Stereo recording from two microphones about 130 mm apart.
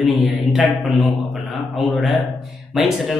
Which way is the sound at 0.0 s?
Centre (ahead or behind).